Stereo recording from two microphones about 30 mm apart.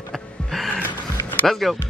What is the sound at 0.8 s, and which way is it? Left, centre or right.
Music, left.